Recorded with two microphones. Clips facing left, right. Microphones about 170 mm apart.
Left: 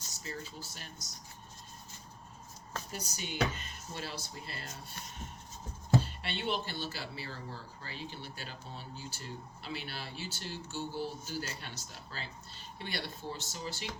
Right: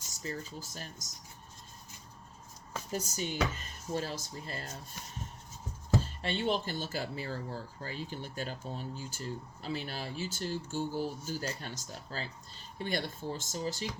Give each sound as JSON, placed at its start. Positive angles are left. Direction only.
{"t": 0.2, "sound": "speech", "side_deg": -40}
{"t": 2.9, "sound": "speech", "side_deg": -45}
{"t": 6.0, "sound": "speech", "side_deg": -40}